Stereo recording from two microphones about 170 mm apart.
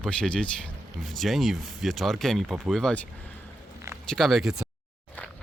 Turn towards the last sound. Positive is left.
turn(degrees=0)  # may be behind; listen again after turning